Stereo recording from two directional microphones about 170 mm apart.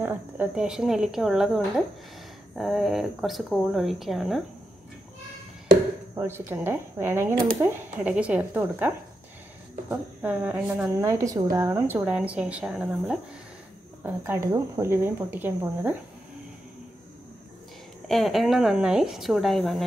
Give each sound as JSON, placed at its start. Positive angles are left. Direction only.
{"t": 0.0, "sound": "a woman's voice", "side_deg": -10}
{"t": 6.1, "sound": "speech", "side_deg": -15}
{"t": 18.0, "sound": "a woman's voice", "side_deg": 0}